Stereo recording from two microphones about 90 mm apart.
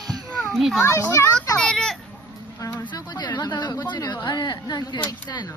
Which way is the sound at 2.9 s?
50° left (ahead or behind).